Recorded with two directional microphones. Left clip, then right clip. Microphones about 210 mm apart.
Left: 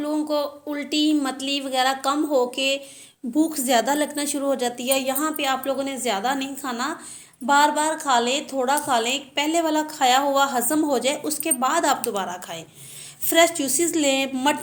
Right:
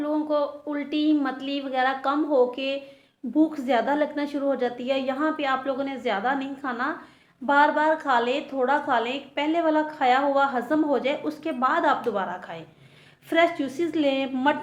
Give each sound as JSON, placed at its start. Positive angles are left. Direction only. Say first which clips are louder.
{"t": 0.0, "sound": "a woman's voice", "louder": "left 1 dB", "side_deg": 35}